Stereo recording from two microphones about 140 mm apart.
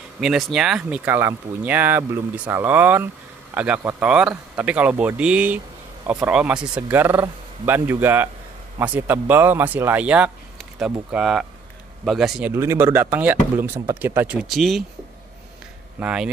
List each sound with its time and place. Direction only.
0.2 s speech: centre (ahead or behind)
12.5 s speech: 20° right (ahead or behind); by 14.9 s centre (ahead or behind)
16.0 s speech: 10° right (ahead or behind)